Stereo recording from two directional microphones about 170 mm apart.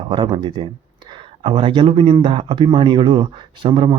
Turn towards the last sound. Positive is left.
turn(degrees=-30)  # may be behind; listen again after turning